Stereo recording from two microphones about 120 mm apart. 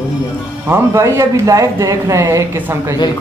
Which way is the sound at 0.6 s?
20° right (ahead or behind).